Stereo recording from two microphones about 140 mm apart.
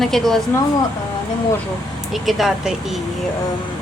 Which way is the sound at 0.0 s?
Centre (ahead or behind).